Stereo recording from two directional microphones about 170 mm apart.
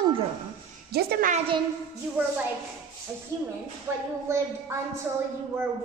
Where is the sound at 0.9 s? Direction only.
60° right (ahead or behind).